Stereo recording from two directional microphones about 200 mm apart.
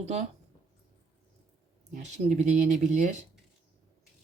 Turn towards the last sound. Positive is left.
turn(degrees=-40)  # may be behind; listen again after turning